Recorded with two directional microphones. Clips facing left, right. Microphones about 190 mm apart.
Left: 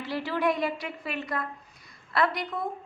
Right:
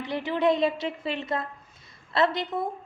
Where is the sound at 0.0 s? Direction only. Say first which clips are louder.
Right 3 dB; 20° right (ahead or behind).